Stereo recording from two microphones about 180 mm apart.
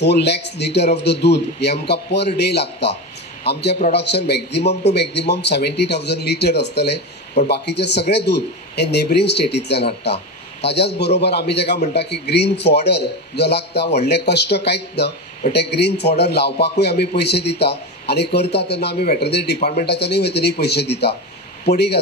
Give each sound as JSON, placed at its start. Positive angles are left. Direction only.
{"t": 0.0, "sound": "a man's voice", "side_deg": 70}